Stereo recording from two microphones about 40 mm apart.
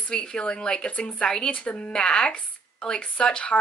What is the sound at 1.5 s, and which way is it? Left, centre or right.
Speech, left.